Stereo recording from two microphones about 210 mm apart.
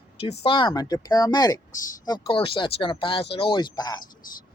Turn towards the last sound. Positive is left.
turn(degrees=20)  # may be behind; listen again after turning